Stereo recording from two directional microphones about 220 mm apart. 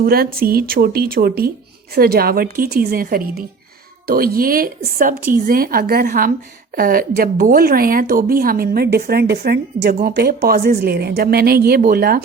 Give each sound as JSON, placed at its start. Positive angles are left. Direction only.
{"t": 0.0, "sound": "a woman's voice", "side_deg": -45}